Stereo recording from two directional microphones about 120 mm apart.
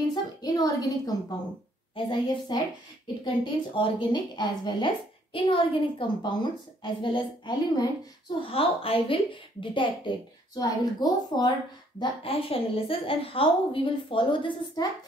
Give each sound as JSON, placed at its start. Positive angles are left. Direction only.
{"t": 0.1, "sound": "a sound", "side_deg": 35}
{"t": 2.0, "sound": "a woman's voice", "side_deg": 40}
{"t": 8.4, "sound": "a woman's voice", "side_deg": 50}
{"t": 10.5, "sound": "a woman's voice", "side_deg": 30}
{"t": 12.0, "sound": "a woman's voice", "side_deg": 50}